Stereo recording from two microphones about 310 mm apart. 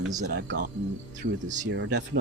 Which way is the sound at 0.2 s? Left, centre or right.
Right.